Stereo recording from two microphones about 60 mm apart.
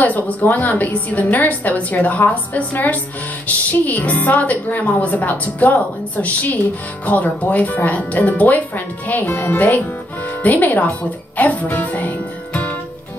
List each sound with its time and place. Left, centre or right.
0.0 s speech: left